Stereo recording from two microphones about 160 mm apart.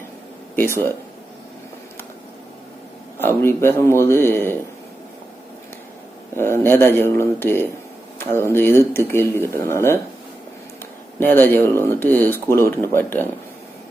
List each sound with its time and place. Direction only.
0.5 s speech: 10° left (ahead or behind)
3.2 s speech: 15° left (ahead or behind)
6.3 s speech: 15° left (ahead or behind)
11.2 s speech: 10° left (ahead or behind)